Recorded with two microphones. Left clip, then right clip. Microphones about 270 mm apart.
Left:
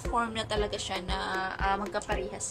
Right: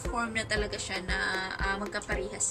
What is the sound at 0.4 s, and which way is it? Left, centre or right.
A woman's voice, centre.